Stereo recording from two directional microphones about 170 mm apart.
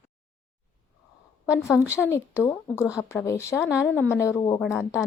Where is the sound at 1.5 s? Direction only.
15° left (ahead or behind).